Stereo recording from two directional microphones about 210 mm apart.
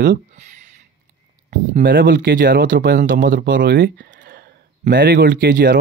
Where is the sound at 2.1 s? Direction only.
40° right (ahead or behind).